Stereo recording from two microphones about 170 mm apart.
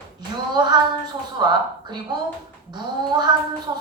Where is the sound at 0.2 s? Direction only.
25° right (ahead or behind).